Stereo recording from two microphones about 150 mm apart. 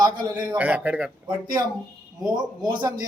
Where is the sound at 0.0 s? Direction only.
25° right (ahead or behind).